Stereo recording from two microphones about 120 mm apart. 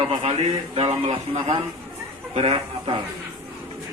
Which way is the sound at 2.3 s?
50° right (ahead or behind).